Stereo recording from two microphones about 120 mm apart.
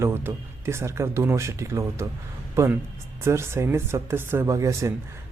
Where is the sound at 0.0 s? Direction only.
20° right (ahead or behind).